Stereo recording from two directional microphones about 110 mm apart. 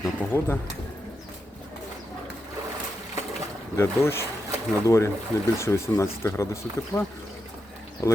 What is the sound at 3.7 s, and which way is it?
Speech, 25° left (ahead or behind).